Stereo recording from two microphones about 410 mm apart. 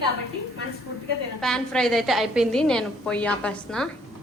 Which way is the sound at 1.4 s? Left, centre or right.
Centre.